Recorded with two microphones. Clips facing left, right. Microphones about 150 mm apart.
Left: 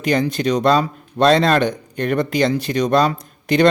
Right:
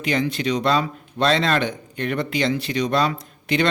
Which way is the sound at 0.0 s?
40° left (ahead or behind).